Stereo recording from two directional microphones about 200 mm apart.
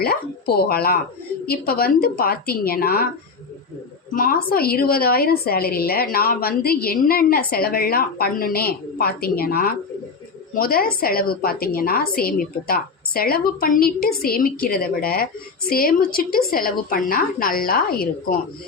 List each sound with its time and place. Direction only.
0.0 s a woman's voice: 50° left (ahead or behind)
4.1 s a woman's voice: 45° left (ahead or behind)